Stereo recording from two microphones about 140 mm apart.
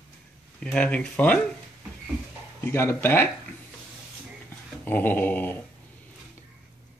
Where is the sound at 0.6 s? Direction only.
10° left (ahead or behind).